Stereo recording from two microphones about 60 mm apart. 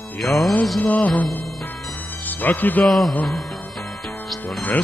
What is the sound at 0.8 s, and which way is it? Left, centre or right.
Music, left.